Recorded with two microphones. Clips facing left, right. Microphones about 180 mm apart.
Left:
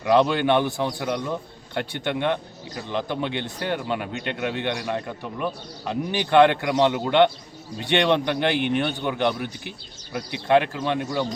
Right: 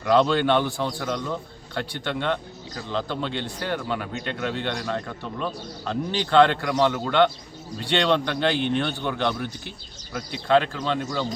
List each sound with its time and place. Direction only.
0.0 s a man's voice: 15° left (ahead or behind)